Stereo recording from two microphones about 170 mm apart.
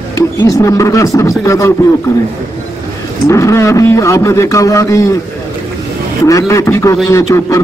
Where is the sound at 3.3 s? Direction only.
15° left (ahead or behind).